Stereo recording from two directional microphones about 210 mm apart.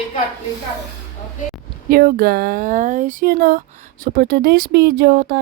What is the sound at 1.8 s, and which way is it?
Speech, 45° right (ahead or behind).